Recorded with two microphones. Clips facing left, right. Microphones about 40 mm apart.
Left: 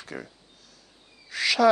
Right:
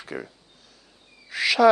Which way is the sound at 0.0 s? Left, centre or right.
Centre.